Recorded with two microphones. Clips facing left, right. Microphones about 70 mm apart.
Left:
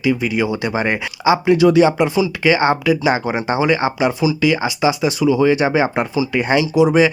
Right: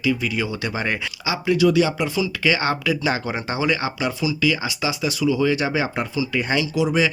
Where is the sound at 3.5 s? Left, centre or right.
Left.